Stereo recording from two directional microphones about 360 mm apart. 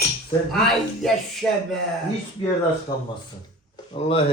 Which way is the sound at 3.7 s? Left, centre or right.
Centre.